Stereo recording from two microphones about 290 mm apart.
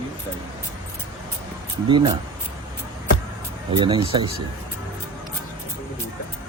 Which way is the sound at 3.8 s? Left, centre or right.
Centre.